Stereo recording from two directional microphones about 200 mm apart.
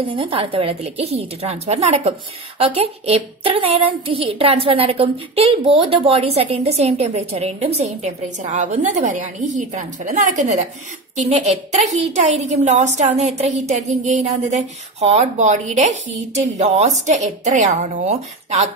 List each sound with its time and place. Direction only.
0.1 s a woman's voice: 25° right (ahead or behind)